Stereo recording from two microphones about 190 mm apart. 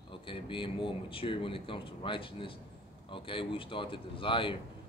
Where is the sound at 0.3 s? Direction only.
25° left (ahead or behind).